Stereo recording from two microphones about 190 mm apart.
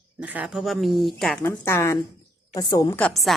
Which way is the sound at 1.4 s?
15° left (ahead or behind).